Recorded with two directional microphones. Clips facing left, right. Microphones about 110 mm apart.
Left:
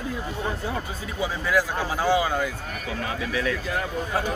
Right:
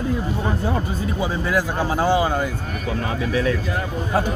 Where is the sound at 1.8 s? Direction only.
45° right (ahead or behind).